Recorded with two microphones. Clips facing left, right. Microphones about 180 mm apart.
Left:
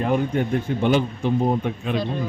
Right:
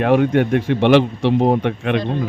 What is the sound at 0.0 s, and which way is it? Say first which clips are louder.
A man's voice: right 7 dB; 75° right (ahead or behind).